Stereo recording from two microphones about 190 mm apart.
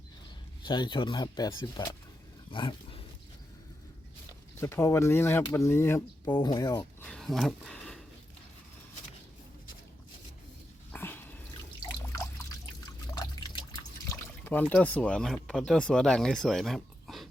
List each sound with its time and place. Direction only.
0.6 s speech: 25° left (ahead or behind)
2.5 s wild animals: 25° left (ahead or behind)
4.6 s speech: 15° left (ahead or behind)
7.0 s a sound: 5° left (ahead or behind)
10.9 s dog: 10° left (ahead or behind)
12.1 s pour: 15° left (ahead or behind)
13.1 s water: 20° left (ahead or behind)
14.7 s speech: 5° left (ahead or behind)